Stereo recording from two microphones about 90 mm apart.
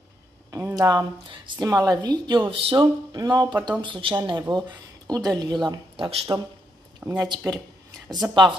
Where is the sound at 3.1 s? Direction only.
50° right (ahead or behind).